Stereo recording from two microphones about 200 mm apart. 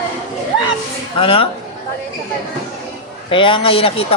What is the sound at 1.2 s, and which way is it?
Speech, 25° left (ahead or behind).